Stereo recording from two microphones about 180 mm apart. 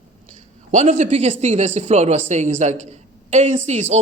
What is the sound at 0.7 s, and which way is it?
A woman's voice, 40° right (ahead or behind).